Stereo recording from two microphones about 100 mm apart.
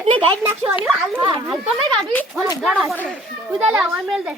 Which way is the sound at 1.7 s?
5° left (ahead or behind).